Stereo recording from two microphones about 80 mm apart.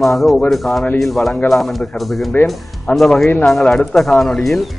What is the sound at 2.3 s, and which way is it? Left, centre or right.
Speech, centre.